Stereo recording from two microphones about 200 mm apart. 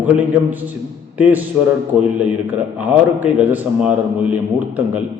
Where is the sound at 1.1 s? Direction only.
10° right (ahead or behind).